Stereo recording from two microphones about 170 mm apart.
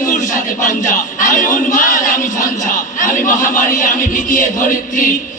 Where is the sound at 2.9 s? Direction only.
50° left (ahead or behind).